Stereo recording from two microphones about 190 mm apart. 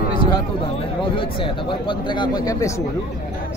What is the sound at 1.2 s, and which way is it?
Speech, 25° left (ahead or behind).